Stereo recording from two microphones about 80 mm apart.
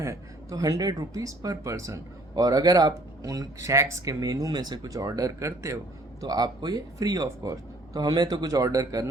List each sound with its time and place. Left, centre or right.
0.0 s speech: right
4.0 s speech: right